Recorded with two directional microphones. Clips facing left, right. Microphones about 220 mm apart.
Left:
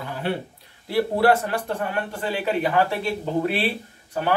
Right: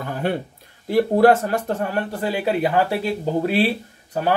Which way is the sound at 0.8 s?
45° right (ahead or behind).